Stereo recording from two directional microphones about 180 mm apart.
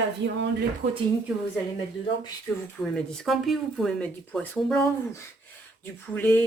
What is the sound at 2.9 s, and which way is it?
Speech, centre (ahead or behind).